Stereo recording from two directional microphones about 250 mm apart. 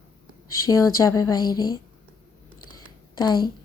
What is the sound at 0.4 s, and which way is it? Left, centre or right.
Speech, centre.